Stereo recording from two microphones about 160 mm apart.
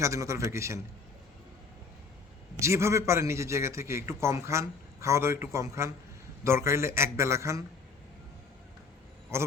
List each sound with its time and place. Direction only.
0.0 s a man's voice: 20° right (ahead or behind)
2.6 s a man's voice: 15° right (ahead or behind)
9.3 s a man's voice: 15° right (ahead or behind)